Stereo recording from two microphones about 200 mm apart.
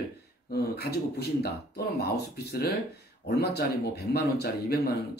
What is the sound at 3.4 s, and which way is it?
Speech, 55° left (ahead or behind).